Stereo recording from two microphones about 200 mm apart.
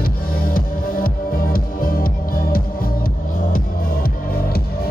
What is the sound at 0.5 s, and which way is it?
Music, 45° left (ahead or behind).